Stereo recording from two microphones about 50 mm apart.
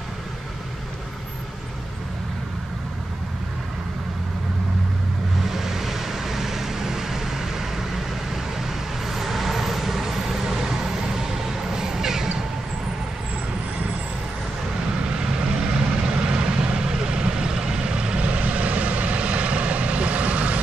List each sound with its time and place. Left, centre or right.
5.5 s vehicle: centre
15.1 s vehicle: right